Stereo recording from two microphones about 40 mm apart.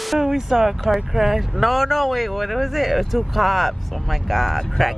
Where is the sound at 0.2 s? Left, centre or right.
Centre.